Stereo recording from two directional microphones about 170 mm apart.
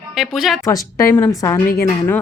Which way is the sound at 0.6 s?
20° left (ahead or behind).